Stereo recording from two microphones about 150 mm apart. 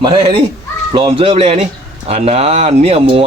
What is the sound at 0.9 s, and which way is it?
Speech, 40° right (ahead or behind).